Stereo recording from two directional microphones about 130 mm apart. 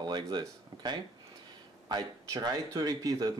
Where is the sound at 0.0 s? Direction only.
35° right (ahead or behind).